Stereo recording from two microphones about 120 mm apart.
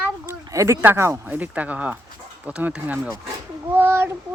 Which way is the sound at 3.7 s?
20° right (ahead or behind).